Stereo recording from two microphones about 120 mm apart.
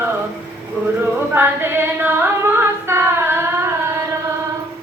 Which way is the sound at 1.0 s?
20° right (ahead or behind).